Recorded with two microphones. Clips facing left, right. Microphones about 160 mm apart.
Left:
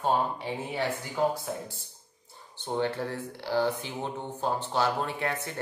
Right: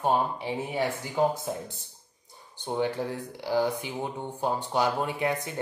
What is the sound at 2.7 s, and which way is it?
Speech, 15° right (ahead or behind).